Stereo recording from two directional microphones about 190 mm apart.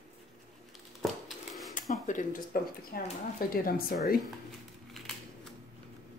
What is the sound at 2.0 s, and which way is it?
Speech, 45° left (ahead or behind).